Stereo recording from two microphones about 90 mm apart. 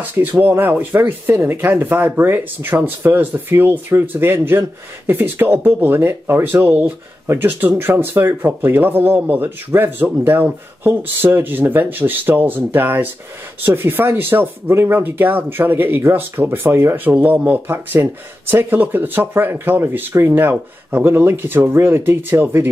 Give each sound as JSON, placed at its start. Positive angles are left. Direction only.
{"t": 0.0, "sound": "speech", "side_deg": -20}